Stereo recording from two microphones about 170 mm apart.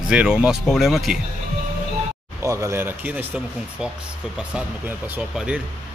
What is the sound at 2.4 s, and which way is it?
Speech, 15° right (ahead or behind).